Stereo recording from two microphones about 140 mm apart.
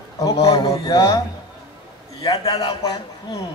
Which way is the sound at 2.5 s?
30° left (ahead or behind).